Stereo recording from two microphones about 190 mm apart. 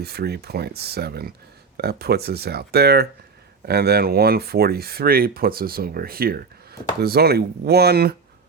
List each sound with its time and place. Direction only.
0.0 s speech: 55° right (ahead or behind)